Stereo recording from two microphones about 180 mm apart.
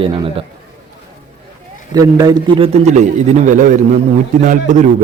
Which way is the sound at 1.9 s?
20° right (ahead or behind).